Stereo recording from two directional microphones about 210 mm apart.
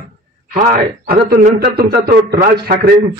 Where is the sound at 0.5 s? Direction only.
45° right (ahead or behind).